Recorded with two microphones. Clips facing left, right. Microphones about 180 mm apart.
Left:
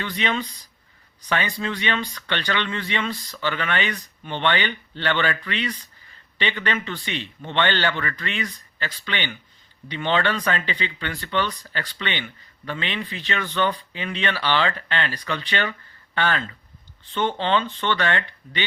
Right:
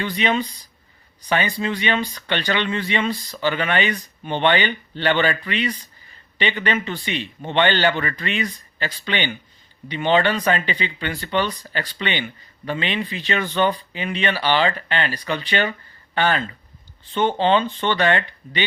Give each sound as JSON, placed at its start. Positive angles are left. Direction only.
{"t": 0.0, "sound": "speech", "side_deg": -10}